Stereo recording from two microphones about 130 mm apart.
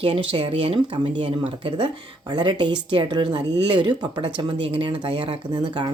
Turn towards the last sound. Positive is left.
turn(degrees=-35)  # may be behind; listen again after turning